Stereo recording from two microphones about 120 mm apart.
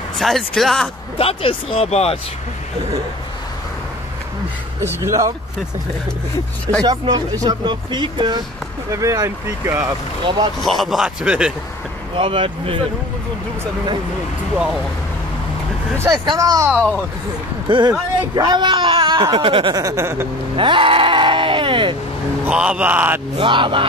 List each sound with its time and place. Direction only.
0.2 s a man's voice: centre (ahead or behind)
1.1 s speech: 50° left (ahead or behind)
4.7 s speech: 25° right (ahead or behind)
6.8 s speech: 35° right (ahead or behind)
8.9 s speech: 25° right (ahead or behind)
10.6 s a man's voice: centre (ahead or behind)
12.2 s speech: 50° right (ahead or behind)
16.1 s speech: 35° right (ahead or behind)
16.7 s a man's voice: 5° left (ahead or behind)
17.6 s speech: 40° right (ahead or behind)
19.7 s speech: 30° right (ahead or behind)
20.5 s sheep: 45° right (ahead or behind)
22.4 s speech: 10° right (ahead or behind)
23.3 s speech: 45° right (ahead or behind)